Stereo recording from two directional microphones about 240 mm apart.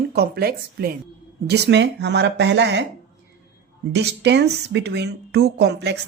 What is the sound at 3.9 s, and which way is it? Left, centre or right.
Speech, right.